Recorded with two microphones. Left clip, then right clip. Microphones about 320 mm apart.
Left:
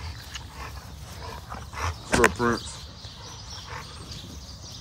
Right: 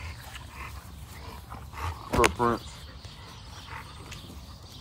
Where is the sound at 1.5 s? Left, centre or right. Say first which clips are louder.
Left 5 dB; left.